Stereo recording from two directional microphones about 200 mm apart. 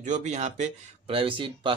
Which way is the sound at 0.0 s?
35° right (ahead or behind).